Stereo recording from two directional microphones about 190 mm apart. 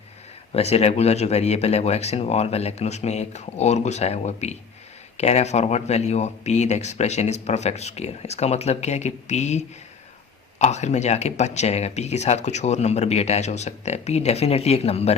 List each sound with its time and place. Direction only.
0.5 s speech: 35° left (ahead or behind)